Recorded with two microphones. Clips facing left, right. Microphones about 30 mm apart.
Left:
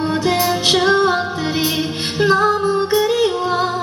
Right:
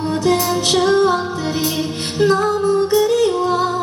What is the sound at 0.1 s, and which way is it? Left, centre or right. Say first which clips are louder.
Music: right 3 dB; left.